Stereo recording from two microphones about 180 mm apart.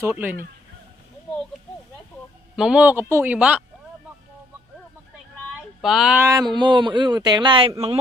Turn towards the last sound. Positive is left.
turn(degrees=-30)  # may be behind; listen again after turning